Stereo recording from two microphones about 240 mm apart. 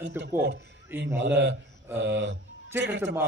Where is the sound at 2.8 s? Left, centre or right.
Right.